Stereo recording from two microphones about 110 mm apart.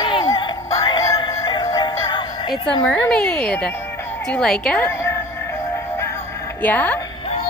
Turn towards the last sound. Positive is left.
turn(degrees=15)  # may be behind; listen again after turning